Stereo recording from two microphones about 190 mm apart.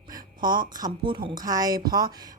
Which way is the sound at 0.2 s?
50° right (ahead or behind).